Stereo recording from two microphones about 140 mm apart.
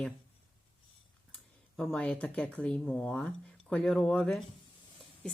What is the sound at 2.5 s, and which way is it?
Speech, 5° left (ahead or behind).